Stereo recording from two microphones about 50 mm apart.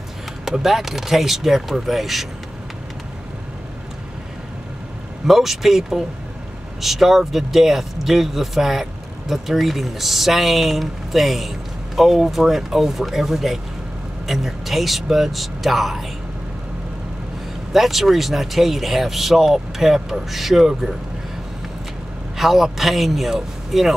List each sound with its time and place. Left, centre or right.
0.5 s speech: centre
5.2 s speech: centre
17.7 s speech: centre
22.4 s speech: centre